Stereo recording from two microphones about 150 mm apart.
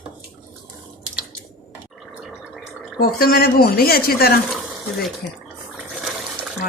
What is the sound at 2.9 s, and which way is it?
Speech, 90° left.